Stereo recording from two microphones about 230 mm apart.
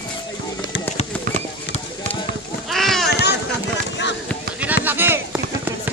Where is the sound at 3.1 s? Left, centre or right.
Left.